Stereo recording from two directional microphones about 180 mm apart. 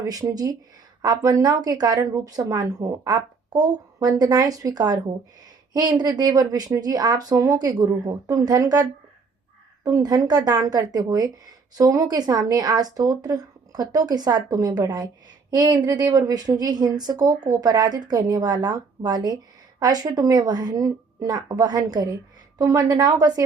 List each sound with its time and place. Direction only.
0.0 s speech: 20° right (ahead or behind)